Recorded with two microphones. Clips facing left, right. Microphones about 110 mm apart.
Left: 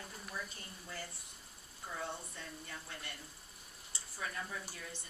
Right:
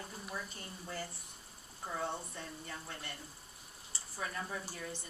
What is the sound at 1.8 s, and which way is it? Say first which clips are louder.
Speech: right 4 dB; 40° right (ahead or behind).